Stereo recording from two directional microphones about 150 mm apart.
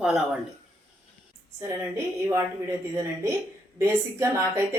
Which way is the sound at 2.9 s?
20° right (ahead or behind).